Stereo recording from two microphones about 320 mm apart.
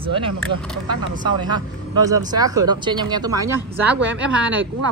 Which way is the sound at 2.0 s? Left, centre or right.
Centre.